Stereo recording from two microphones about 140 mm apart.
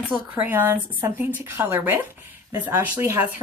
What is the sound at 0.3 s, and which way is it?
Speech, 15° right (ahead or behind).